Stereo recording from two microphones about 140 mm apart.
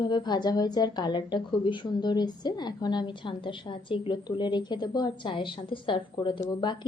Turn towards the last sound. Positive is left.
turn(degrees=30)  # may be behind; listen again after turning